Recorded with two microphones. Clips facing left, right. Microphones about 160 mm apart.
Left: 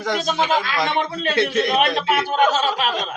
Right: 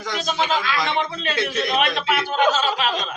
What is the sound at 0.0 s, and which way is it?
A man's voice, 55° left (ahead or behind).